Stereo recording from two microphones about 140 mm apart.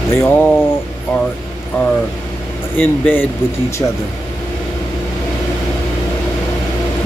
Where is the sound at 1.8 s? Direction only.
15° left (ahead or behind).